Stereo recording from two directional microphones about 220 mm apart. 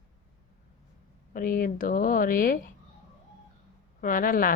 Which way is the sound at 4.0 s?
40° left (ahead or behind).